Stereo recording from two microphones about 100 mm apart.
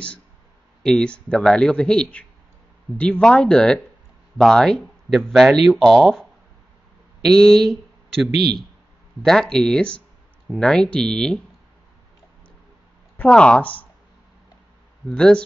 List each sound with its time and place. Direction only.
0.8 s speech: 10° left (ahead or behind)
7.2 s speech: 5° left (ahead or behind)
9.2 s speech: 5° left (ahead or behind)
13.2 s speech: 10° left (ahead or behind)
15.0 s speech: 10° left (ahead or behind)